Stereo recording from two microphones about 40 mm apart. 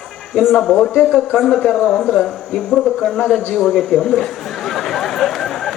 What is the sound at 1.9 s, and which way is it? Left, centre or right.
Speech, centre.